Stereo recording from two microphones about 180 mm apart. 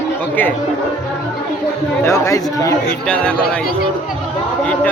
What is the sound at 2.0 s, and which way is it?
Speech, 15° left (ahead or behind).